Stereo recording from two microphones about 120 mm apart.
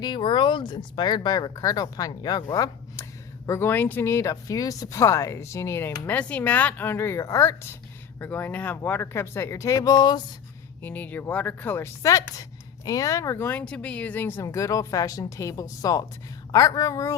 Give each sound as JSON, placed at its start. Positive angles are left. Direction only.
{"t": 0.0, "sound": "speech", "side_deg": 40}
{"t": 6.1, "sound": "speech", "side_deg": 10}
{"t": 10.8, "sound": "speech", "side_deg": 15}
{"t": 14.4, "sound": "a woman's voice", "side_deg": 30}